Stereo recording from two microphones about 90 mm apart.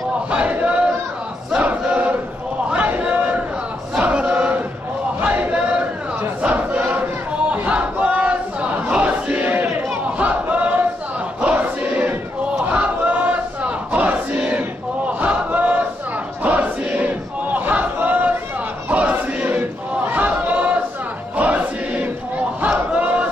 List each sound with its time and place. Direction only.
0.3 s crowd: 15° right (ahead or behind)
2.7 s a sound: 15° right (ahead or behind)
4.0 s chant: 15° right (ahead or behind)
5.2 s a sound: 15° right (ahead or behind)
6.4 s crowd: 15° right (ahead or behind)
10.1 s battle cry: 15° right (ahead or behind)
16.4 s crowd: 15° right (ahead or behind)
18.9 s battle cry: 15° right (ahead or behind)
21.4 s music: 15° right (ahead or behind)
22.6 s crowd: 15° right (ahead or behind)